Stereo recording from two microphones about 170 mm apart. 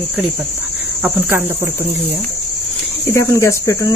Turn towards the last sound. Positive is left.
turn(degrees=20)  # may be behind; listen again after turning